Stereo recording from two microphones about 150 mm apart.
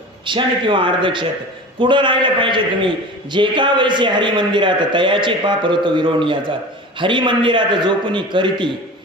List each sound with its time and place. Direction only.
0.3 s a man's voice: 30° right (ahead or behind)